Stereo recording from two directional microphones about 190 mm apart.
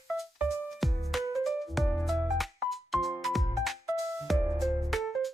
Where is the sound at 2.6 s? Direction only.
Centre (ahead or behind).